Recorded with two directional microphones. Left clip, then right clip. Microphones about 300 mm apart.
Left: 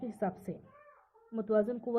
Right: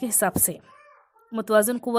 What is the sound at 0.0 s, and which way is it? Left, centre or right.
A woman's voice, right.